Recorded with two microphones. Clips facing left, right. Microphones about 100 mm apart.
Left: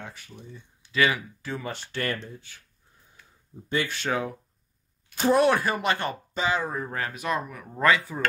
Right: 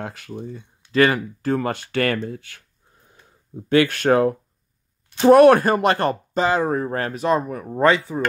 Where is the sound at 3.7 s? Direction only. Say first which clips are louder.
Right 11 dB; 60° right (ahead or behind).